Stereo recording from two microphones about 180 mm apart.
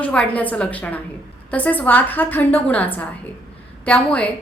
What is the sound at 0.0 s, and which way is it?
A woman's voice, 5° left (ahead or behind).